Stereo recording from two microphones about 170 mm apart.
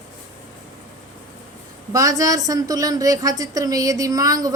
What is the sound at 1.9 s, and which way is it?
A woman's voice, 20° right (ahead or behind).